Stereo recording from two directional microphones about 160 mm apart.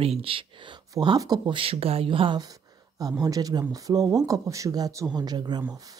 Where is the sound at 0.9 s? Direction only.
25° right (ahead or behind).